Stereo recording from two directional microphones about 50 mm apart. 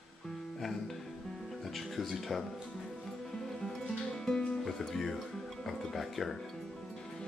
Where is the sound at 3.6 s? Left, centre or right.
Centre.